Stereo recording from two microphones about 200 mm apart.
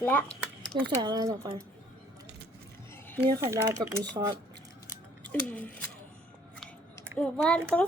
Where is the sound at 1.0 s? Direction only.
20° right (ahead or behind).